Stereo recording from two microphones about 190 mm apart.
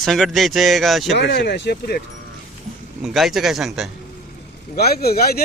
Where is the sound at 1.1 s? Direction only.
65° left (ahead or behind).